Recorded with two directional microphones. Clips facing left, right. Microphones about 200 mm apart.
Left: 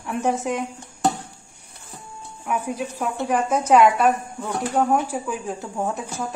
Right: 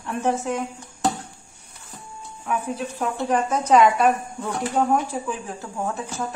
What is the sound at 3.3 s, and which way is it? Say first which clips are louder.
Speech: left 1 dB; 10° left (ahead or behind).